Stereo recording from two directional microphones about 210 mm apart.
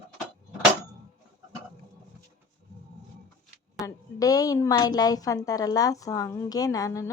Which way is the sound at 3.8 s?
15° left (ahead or behind).